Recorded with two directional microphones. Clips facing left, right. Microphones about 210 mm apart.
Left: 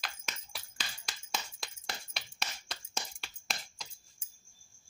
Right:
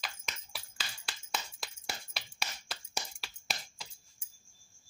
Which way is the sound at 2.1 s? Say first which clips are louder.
Even; centre (ahead or behind).